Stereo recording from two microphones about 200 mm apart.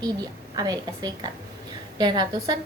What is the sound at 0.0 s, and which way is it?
A woman's voice, 20° right (ahead or behind).